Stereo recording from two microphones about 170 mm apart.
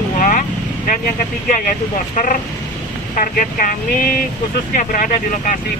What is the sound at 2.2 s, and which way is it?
Speech, 50° left (ahead or behind).